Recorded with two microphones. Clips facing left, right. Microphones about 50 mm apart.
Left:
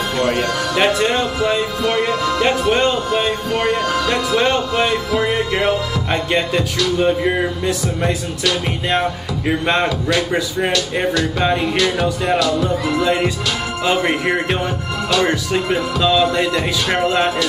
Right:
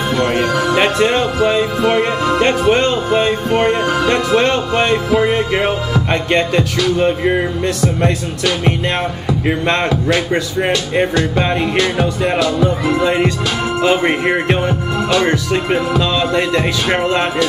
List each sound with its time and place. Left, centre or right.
0.3 s speech: centre
2.4 s music: centre
4.9 s music: right
5.3 s speech: centre
7.0 s music: centre
9.8 s music: right
11.6 s music: right
12.2 s speech: centre
15.2 s music: centre